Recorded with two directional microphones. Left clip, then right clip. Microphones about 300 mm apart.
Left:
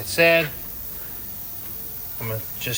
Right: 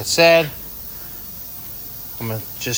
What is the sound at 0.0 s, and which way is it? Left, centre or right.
Speech, centre.